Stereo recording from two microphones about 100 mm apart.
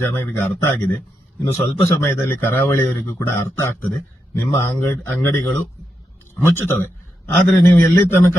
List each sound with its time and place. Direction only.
0.0 s a man's voice: 20° left (ahead or behind)